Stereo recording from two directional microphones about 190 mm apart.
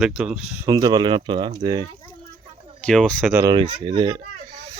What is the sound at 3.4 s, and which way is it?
Speech, 25° right (ahead or behind).